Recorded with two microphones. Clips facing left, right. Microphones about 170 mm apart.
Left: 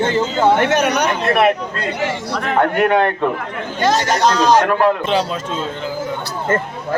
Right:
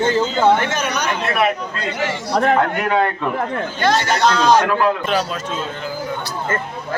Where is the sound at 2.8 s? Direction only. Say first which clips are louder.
Left 4 dB; 60° left (ahead or behind).